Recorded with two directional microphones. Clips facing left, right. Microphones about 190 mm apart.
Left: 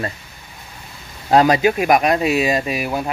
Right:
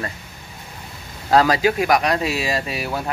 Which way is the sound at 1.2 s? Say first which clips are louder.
Left 2 dB; 20° left (ahead or behind).